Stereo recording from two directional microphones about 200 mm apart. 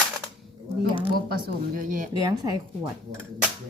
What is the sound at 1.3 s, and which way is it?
Speech, 45° right (ahead or behind).